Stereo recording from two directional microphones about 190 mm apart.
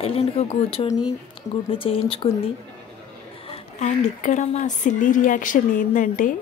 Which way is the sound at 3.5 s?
40° left (ahead or behind).